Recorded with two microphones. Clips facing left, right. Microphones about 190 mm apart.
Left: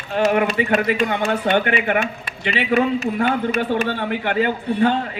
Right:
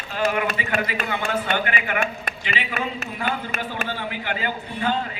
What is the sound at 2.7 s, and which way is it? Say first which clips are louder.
Speech: left 11 dB; 35° left (ahead or behind).